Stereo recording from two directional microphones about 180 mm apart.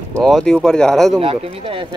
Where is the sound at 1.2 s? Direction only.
30° right (ahead or behind).